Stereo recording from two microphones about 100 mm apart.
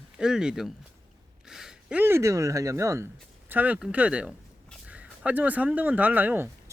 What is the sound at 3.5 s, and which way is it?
Speech, 20° right (ahead or behind).